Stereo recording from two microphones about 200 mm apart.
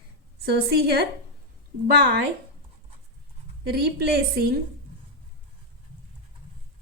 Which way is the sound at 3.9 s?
50° right (ahead or behind).